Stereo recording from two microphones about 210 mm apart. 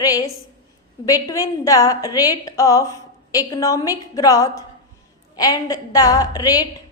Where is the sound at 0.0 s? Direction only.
15° left (ahead or behind).